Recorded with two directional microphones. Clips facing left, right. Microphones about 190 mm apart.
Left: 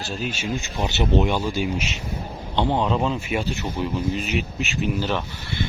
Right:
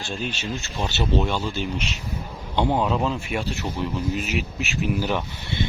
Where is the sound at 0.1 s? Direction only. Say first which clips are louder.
Left 2 dB; 5° left (ahead or behind).